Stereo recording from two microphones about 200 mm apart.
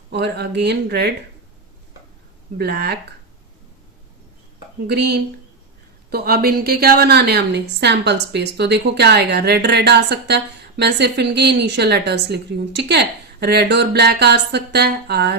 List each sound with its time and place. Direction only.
0.1 s a woman's voice: 55° right (ahead or behind)
2.6 s speech: 55° right (ahead or behind)
4.9 s a woman's voice: 55° right (ahead or behind)